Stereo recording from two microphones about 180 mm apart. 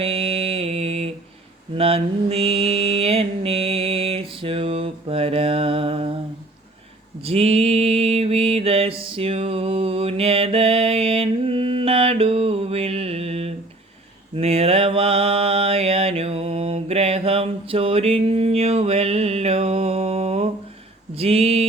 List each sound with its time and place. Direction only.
0.0 s mantra: 30° right (ahead or behind)
7.3 s mantra: 35° right (ahead or behind)
21.2 s a sound: 35° right (ahead or behind)